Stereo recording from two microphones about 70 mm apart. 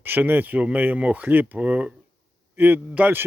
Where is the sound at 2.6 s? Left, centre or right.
Right.